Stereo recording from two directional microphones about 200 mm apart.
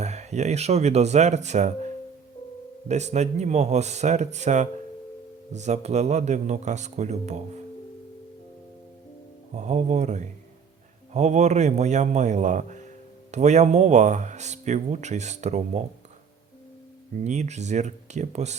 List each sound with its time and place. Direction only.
0.0 s speech: 35° right (ahead or behind)
2.9 s speech: 35° right (ahead or behind)
9.6 s speech: 35° right (ahead or behind)
17.2 s speech: 35° right (ahead or behind)